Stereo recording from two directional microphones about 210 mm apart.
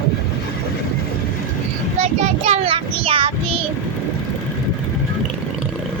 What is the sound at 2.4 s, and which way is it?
Speech, 30° right (ahead or behind).